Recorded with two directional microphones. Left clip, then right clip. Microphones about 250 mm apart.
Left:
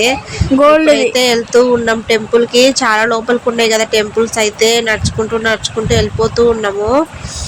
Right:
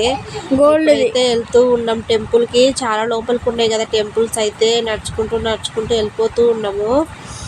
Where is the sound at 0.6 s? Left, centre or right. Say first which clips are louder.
Left 3 dB; centre.